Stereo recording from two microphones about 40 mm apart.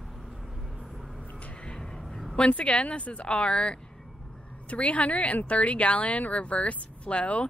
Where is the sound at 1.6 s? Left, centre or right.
Centre.